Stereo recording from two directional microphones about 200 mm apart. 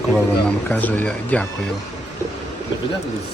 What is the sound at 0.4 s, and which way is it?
Speech, 10° left (ahead or behind).